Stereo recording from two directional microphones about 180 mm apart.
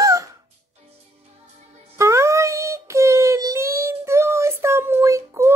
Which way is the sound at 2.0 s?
15° right (ahead or behind).